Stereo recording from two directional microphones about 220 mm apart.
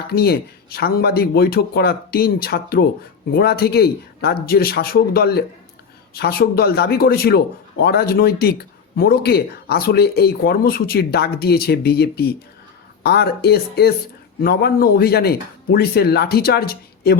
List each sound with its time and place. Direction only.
0.1 s speech: 45° left (ahead or behind)